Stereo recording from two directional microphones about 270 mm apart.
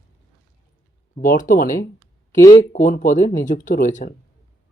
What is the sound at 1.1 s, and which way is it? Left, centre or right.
Speech, left.